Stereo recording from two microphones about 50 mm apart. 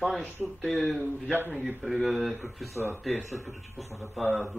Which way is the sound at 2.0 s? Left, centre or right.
Centre.